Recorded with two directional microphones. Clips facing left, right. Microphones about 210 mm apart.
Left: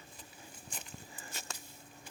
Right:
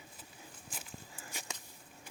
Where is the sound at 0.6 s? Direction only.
5° right (ahead or behind).